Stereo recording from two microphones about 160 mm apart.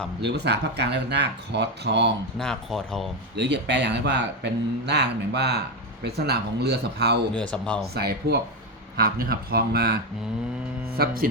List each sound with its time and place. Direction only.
0.2 s speech: 90° right
2.4 s speech: centre (ahead or behind)
3.3 s speech: 90° right
7.3 s speech: 5° left (ahead or behind)
7.9 s speech: 80° right
9.0 s speech: 70° right (ahead or behind)